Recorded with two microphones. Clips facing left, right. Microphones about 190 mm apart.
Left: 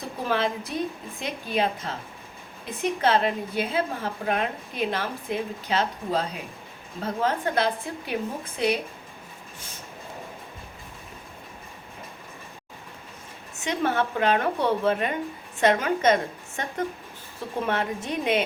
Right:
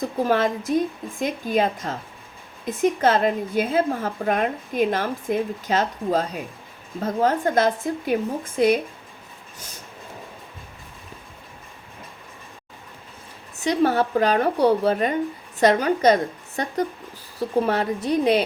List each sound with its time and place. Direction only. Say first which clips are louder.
0.3 s speech: right 3 dB; 45° right (ahead or behind)
13.6 s a woman's voice: right 5 dB; 35° right (ahead or behind)